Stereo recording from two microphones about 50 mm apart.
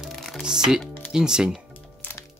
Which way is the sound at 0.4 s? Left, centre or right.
Centre.